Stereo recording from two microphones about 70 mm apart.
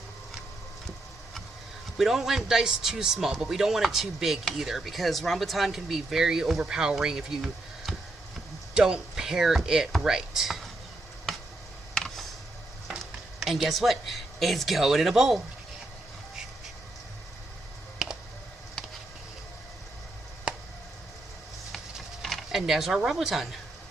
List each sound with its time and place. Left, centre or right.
2.0 s speech: centre
11.9 s computer keyboard: centre
13.0 s speech: centre
22.2 s speech: centre